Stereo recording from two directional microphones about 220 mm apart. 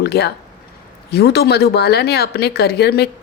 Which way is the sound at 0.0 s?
45° left (ahead or behind).